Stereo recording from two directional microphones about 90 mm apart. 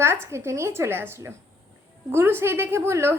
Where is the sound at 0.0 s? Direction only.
30° right (ahead or behind).